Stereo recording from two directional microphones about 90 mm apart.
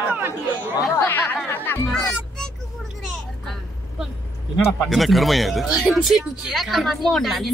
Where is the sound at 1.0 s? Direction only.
25° left (ahead or behind).